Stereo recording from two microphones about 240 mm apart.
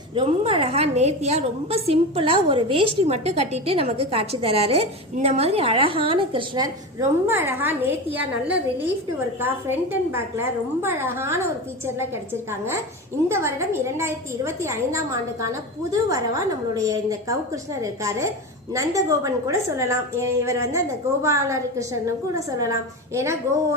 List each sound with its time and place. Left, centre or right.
0.1 s a woman's voice: right
9.4 s a woman's voice: centre